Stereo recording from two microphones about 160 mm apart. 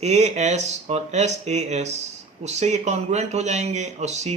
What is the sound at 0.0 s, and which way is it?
Speech, 45° right (ahead or behind).